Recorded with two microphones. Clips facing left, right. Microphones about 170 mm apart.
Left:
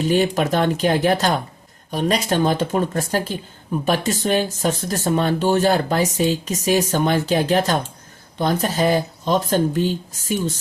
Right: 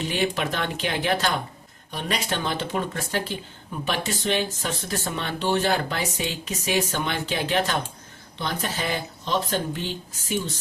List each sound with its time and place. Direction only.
0.0 s speech: 40° left (ahead or behind)